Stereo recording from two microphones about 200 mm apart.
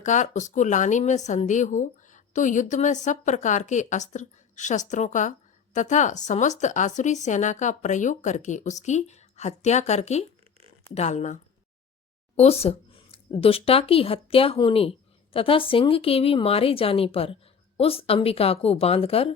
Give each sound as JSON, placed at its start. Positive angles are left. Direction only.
{"t": 0.0, "sound": "speech", "side_deg": 40}
{"t": 12.4, "sound": "speech", "side_deg": 30}